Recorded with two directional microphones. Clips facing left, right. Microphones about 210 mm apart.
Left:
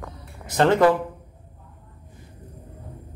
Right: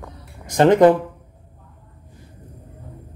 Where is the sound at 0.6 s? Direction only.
20° right (ahead or behind).